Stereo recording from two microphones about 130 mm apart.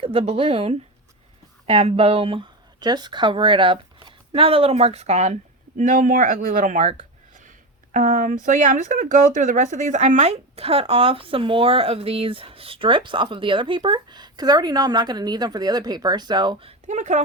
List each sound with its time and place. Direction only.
0.0 s speech: 45° right (ahead or behind); by 6.9 s 65° right (ahead or behind)
7.9 s speech: 90° right; by 16.7 s 40° right (ahead or behind)
16.8 s speech: 65° right (ahead or behind)